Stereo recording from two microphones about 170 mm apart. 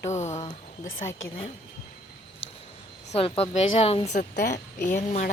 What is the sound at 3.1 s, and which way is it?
A woman's voice, 35° left (ahead or behind).